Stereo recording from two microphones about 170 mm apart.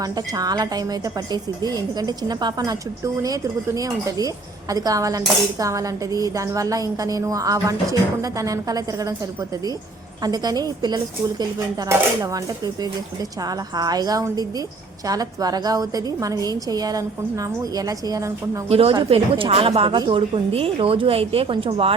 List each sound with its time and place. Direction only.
0.0 s speech: 20° right (ahead or behind)
10.2 s speech: 25° right (ahead or behind)
18.7 s a woman's voice: 35° right (ahead or behind)